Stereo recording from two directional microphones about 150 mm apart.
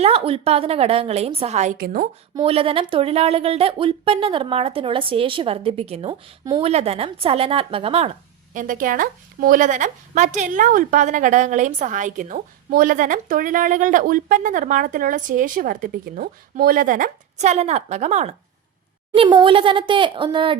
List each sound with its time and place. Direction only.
0.0 s a woman's voice: 40° right (ahead or behind)
1.8 s a woman's voice: 70° right (ahead or behind)
2.4 s a woman's voice: 40° right (ahead or behind)
8.5 s a woman's voice: 60° right (ahead or behind)
19.1 s a woman's voice: 35° right (ahead or behind)